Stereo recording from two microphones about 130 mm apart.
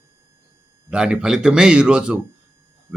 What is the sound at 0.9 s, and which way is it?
A man's voice, 5° right (ahead or behind).